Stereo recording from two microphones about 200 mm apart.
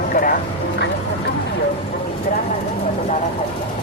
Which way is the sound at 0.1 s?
45° left (ahead or behind).